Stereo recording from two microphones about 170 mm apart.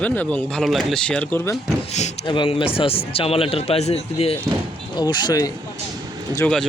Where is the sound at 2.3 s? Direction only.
30° left (ahead or behind).